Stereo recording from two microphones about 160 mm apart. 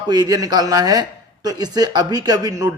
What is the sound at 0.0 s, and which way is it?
Speech, 25° right (ahead or behind).